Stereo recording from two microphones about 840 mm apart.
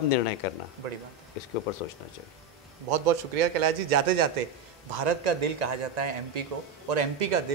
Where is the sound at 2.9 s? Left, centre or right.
Right.